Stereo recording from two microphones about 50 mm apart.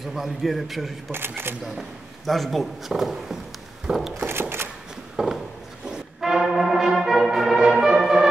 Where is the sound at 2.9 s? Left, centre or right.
Centre.